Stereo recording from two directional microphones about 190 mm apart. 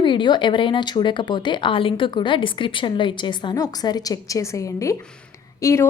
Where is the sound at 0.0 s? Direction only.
25° left (ahead or behind).